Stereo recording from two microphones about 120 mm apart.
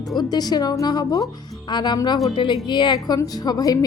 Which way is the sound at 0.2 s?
35° left (ahead or behind).